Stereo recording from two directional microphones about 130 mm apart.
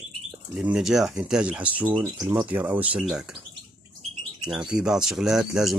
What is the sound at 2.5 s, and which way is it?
Speech, 15° right (ahead or behind).